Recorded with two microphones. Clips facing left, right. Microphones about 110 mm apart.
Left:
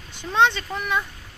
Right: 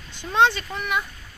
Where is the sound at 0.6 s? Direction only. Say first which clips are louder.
Left 1 dB; centre (ahead or behind).